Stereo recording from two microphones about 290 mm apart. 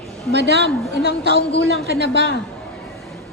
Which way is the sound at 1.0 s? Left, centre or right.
Left.